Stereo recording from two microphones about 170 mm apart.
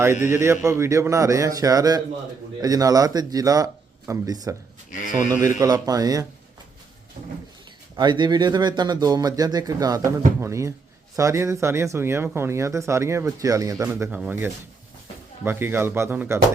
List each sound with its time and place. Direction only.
0.3 s speech: 15° right (ahead or behind)
4.9 s speech: 50° left (ahead or behind)
5.4 s speech: 20° right (ahead or behind)
7.9 s speech: 25° right (ahead or behind)